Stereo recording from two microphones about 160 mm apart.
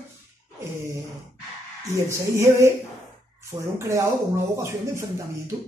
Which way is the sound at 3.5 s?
35° right (ahead or behind).